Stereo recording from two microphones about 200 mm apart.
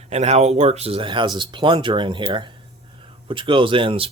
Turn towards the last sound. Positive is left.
turn(degrees=-25)  # may be behind; listen again after turning